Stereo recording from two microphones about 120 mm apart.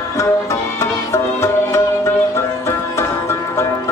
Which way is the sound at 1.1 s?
20° left (ahead or behind).